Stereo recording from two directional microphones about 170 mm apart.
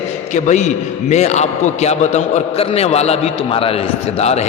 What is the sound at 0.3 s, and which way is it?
A man's voice, 45° left (ahead or behind).